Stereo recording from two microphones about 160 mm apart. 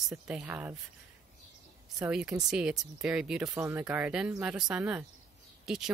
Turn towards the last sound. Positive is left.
turn(degrees=-5)  # may be behind; listen again after turning